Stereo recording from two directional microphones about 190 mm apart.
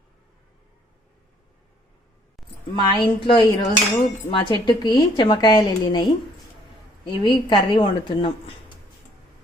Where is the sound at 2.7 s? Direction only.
25° left (ahead or behind).